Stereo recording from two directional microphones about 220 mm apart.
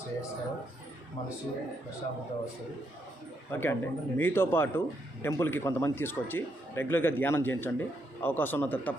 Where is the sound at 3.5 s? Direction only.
10° left (ahead or behind).